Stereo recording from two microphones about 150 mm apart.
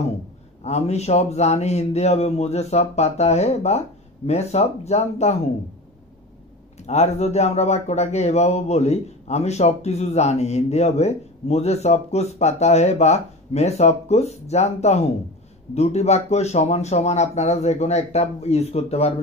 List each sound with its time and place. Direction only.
0.7 s speech: 45° left (ahead or behind)
6.9 s speech: 45° left (ahead or behind)